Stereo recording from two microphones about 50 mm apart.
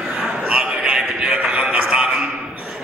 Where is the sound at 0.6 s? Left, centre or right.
Right.